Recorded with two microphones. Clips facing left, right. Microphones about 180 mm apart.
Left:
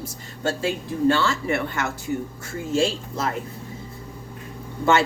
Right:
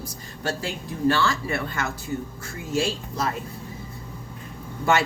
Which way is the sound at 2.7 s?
25° left (ahead or behind).